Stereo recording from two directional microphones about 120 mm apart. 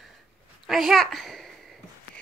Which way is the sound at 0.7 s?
Centre (ahead or behind).